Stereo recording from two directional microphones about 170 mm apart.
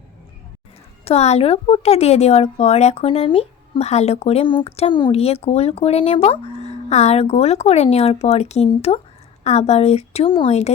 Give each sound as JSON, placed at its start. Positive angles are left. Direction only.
{"t": 1.0, "sound": "speech", "side_deg": 40}